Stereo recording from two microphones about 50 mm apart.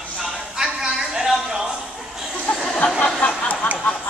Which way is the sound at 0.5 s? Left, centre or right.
Centre.